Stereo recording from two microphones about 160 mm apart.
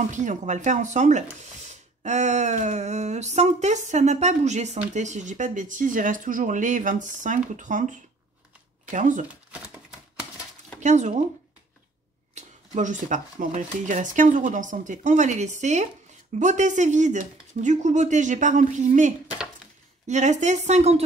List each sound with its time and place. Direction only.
0.1 s speech: 50° right (ahead or behind)
8.9 s speech: 50° right (ahead or behind)
9.3 s a sound: 10° right (ahead or behind)
10.8 s speech: 50° right (ahead or behind)
12.4 s speech: 50° right (ahead or behind)